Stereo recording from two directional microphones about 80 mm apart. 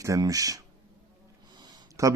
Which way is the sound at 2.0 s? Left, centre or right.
Right.